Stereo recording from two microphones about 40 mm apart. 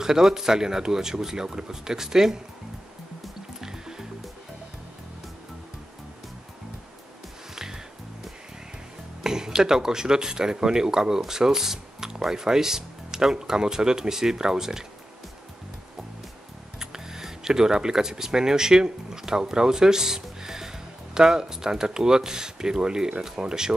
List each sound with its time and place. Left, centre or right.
0.0 s speech: centre
3.6 s music: centre
7.5 s music: centre
9.2 s speech: centre
16.8 s speech: centre